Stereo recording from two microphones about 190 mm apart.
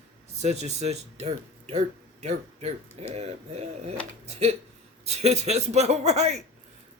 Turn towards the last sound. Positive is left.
turn(degrees=-35)  # may be behind; listen again after turning